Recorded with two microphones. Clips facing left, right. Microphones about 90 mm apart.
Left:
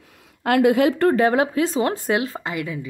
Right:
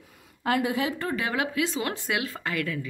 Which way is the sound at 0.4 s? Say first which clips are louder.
Left 9 dB; 70° left (ahead or behind).